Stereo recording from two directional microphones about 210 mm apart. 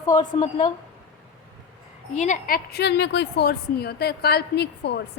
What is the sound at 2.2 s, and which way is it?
A woman's voice, 40° left (ahead or behind).